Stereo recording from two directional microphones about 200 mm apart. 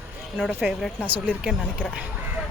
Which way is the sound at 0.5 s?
5° right (ahead or behind).